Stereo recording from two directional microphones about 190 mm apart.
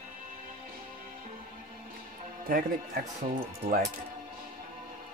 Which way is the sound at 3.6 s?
35° right (ahead or behind).